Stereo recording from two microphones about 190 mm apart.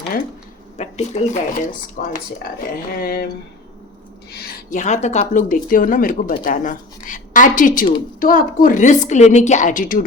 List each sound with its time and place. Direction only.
0.8 s a woman's voice: 35° left (ahead or behind); by 3.2 s 50° left (ahead or behind)
4.3 s a woman's voice: 55° left (ahead or behind)